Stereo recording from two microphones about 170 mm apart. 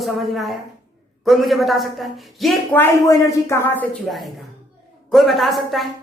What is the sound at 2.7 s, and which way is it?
Speech, 15° left (ahead or behind).